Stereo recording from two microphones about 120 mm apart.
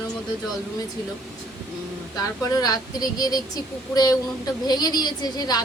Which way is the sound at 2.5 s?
30° left (ahead or behind).